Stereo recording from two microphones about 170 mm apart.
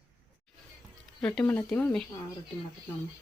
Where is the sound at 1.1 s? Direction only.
5° left (ahead or behind).